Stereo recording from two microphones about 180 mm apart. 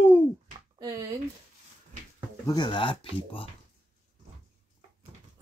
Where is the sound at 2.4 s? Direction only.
25° left (ahead or behind).